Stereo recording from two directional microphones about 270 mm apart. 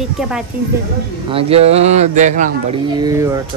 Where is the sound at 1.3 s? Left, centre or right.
Right.